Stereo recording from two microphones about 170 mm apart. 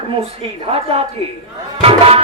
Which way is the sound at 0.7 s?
35° right (ahead or behind).